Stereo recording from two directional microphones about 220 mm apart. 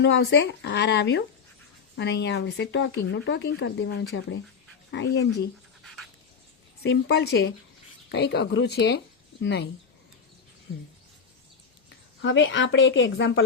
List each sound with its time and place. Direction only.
0.0 s speech: 50° left (ahead or behind)
5.8 s a sound: centre (ahead or behind)
6.8 s speech: 50° left (ahead or behind)
12.2 s speech: 55° left (ahead or behind)